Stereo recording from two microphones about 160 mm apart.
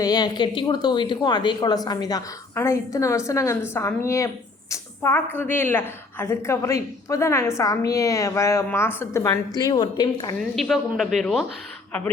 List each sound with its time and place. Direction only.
0.0 s a woman's voice: 25° left (ahead or behind)
10.5 s speech: centre (ahead or behind)